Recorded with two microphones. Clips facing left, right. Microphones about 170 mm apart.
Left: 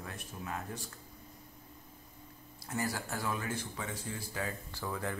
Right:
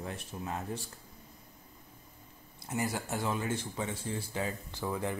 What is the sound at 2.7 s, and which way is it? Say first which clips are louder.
Speech: right 2 dB; 20° right (ahead or behind).